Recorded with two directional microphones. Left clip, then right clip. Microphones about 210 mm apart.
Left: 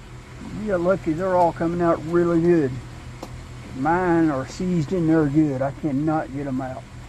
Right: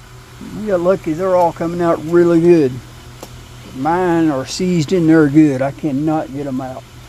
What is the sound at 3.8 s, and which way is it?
Speech, 55° right (ahead or behind).